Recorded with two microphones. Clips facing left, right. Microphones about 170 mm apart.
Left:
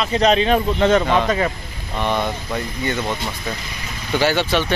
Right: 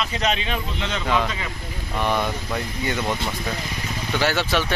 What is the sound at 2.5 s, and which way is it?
Speech, 5° right (ahead or behind).